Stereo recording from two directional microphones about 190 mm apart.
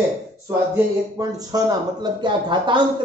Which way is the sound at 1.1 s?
20° right (ahead or behind).